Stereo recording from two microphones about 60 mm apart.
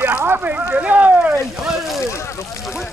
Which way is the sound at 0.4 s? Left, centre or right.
Right.